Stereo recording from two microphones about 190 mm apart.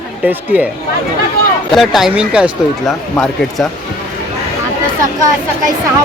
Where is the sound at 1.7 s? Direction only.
Centre (ahead or behind).